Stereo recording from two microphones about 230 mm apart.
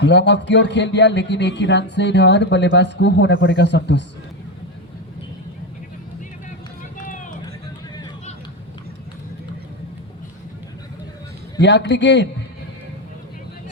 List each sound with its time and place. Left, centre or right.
0.0 s speech: left
11.6 s speech: left